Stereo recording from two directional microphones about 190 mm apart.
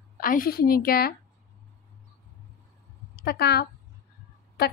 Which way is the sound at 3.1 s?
55° left (ahead or behind).